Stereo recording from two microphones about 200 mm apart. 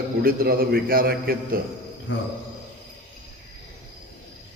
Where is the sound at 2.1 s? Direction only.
65° left (ahead or behind).